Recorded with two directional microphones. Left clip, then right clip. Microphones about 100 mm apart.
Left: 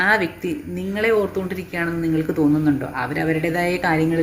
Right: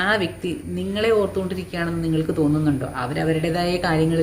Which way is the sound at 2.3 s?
15° right (ahead or behind).